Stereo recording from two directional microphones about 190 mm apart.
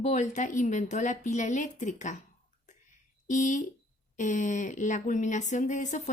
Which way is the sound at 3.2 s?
40° left (ahead or behind).